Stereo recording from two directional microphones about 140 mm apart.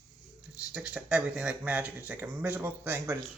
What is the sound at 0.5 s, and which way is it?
Speech, 10° right (ahead or behind).